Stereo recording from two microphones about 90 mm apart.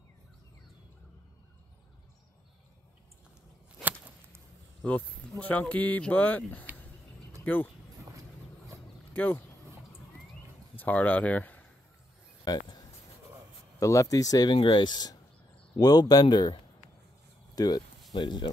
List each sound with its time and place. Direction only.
5.4 s speech: 15° left (ahead or behind)
9.1 s speech: 20° left (ahead or behind)
10.8 s speech: 20° left (ahead or behind)
12.4 s a sound: 45° left (ahead or behind)
13.7 s speech: 35° left (ahead or behind)
14.6 s speech: 60° left (ahead or behind)
17.6 s speech: 45° left (ahead or behind)
18.1 s speech: 55° left (ahead or behind)